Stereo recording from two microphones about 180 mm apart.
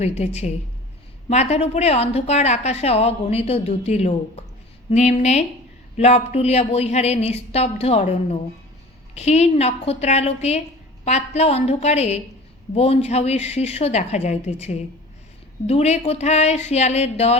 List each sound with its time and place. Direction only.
0.0 s a woman's voice: 35° left (ahead or behind)
1.3 s a woman's voice: 40° left (ahead or behind)